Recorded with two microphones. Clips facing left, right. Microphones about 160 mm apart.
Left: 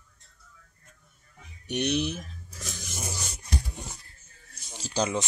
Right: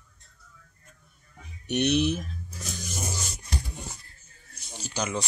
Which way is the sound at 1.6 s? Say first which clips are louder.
Right 4 dB; 60° right (ahead or behind).